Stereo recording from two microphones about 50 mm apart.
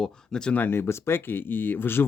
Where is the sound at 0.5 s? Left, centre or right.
Left.